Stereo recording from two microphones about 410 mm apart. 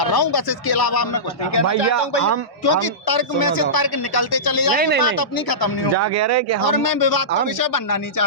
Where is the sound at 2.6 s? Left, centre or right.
Left.